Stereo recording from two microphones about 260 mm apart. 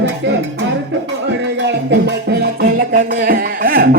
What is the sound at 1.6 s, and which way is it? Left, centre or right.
Music, right.